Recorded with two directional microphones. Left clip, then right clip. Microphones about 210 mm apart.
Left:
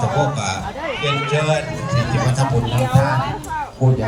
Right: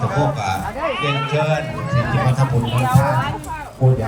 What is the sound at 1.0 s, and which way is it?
Speech, 50° left (ahead or behind).